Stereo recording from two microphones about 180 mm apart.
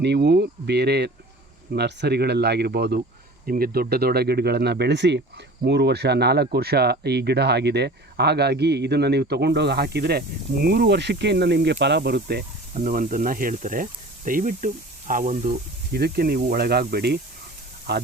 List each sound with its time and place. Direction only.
0.0 s speech: 70° right (ahead or behind)
3.4 s speech: 55° right (ahead or behind)